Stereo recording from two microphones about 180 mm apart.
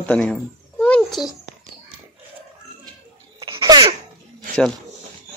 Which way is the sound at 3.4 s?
30° right (ahead or behind).